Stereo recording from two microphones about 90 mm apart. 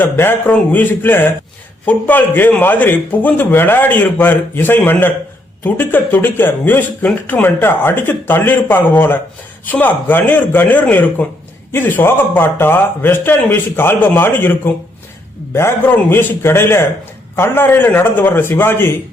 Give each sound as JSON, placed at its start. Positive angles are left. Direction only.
{"t": 0.0, "sound": "speech", "side_deg": 25}